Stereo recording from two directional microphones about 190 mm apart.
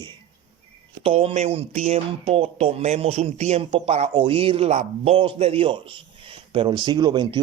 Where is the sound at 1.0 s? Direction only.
30° right (ahead or behind).